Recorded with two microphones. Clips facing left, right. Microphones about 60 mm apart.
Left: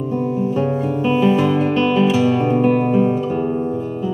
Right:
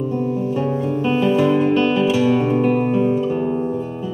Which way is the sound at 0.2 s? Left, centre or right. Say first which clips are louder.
Left 2 dB; centre.